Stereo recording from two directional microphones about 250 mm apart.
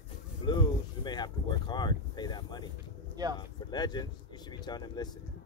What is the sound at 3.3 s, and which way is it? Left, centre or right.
Speech, centre.